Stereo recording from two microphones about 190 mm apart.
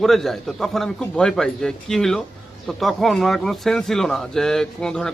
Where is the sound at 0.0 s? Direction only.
Centre (ahead or behind).